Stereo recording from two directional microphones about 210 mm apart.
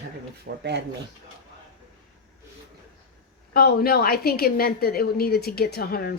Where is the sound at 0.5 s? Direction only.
50° right (ahead or behind).